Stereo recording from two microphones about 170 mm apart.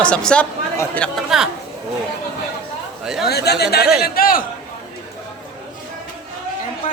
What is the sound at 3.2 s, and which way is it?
A man's voice, 70° left (ahead or behind).